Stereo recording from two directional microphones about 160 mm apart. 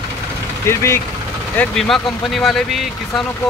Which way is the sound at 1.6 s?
Centre (ahead or behind).